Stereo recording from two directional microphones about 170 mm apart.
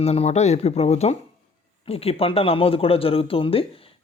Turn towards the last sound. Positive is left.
turn(degrees=35)  # may be behind; listen again after turning